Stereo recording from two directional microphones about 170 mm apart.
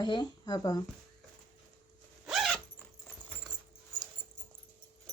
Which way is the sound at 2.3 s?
Centre (ahead or behind).